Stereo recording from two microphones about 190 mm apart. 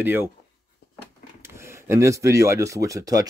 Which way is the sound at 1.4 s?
15° right (ahead or behind).